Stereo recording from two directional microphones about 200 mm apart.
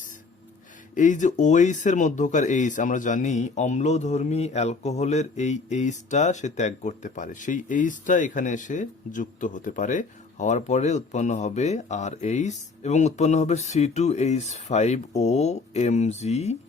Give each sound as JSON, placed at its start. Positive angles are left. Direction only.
{"t": 0.9, "sound": "speech", "side_deg": 40}